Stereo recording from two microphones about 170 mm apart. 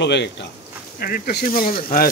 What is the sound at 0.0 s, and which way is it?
Speech, 90° left.